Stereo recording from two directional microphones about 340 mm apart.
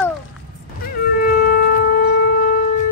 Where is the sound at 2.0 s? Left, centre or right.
Left.